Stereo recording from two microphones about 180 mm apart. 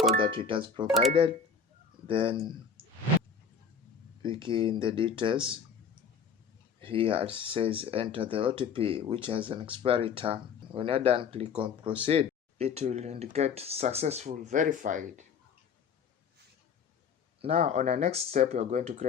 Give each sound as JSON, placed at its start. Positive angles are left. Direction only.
{"t": 0.2, "sound": "speech", "side_deg": -30}
{"t": 2.8, "sound": "a sound", "side_deg": -30}
{"t": 4.2, "sound": "speech", "side_deg": -30}
{"t": 6.8, "sound": "speech", "side_deg": -30}
{"t": 17.4, "sound": "speech", "side_deg": -35}